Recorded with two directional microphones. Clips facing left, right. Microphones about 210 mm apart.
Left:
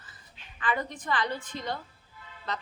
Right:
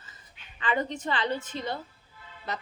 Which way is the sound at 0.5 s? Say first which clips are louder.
Right 2 dB; 20° right (ahead or behind).